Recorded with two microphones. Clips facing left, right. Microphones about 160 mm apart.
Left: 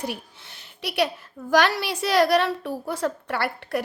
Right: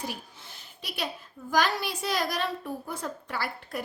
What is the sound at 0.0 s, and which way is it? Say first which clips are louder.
A woman's voice: left 5 dB; 70° left (ahead or behind).